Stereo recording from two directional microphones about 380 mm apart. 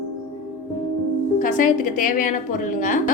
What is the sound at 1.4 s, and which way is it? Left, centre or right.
A woman's voice, left.